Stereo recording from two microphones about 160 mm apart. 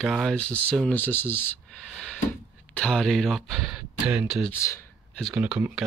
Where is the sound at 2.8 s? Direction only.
5° left (ahead or behind).